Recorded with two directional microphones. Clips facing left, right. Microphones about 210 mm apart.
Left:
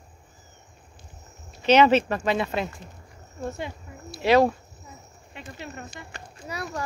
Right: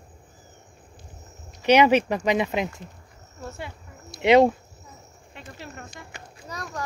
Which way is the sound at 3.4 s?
20° left (ahead or behind).